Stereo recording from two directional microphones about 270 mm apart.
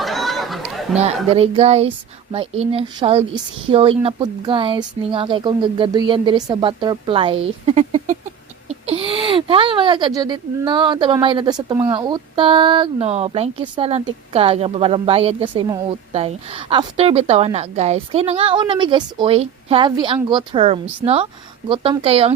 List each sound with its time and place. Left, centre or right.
0.0 s chatter: centre
0.9 s speech: right